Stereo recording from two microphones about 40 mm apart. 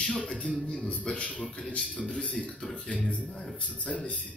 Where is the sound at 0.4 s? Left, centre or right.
Left.